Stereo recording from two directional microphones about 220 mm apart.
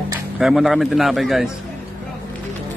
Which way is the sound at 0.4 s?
Centre (ahead or behind).